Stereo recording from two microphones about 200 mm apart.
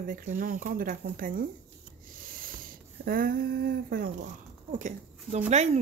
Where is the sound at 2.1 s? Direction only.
45° right (ahead or behind).